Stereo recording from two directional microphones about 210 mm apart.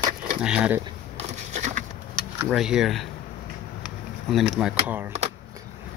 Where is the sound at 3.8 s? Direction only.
Centre (ahead or behind).